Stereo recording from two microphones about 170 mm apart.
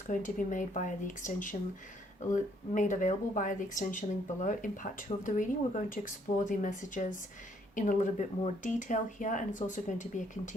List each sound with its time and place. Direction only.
0.1 s speech: 50° left (ahead or behind)